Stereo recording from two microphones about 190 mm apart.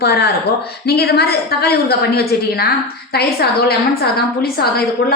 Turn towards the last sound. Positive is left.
turn(degrees=55)  # may be behind; listen again after turning